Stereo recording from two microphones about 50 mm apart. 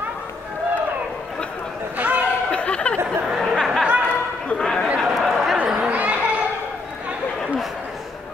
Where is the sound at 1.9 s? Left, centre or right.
Right.